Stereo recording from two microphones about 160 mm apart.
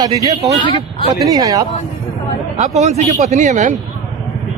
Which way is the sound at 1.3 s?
20° right (ahead or behind).